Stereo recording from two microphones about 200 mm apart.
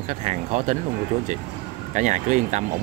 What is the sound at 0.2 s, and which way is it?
Speech, 35° right (ahead or behind).